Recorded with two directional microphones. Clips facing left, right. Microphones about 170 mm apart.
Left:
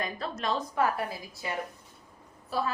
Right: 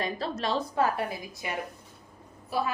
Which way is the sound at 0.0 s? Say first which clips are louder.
Right 2 dB; 30° right (ahead or behind).